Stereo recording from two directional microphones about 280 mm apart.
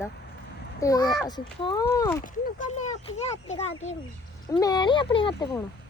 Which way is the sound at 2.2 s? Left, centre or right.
Left.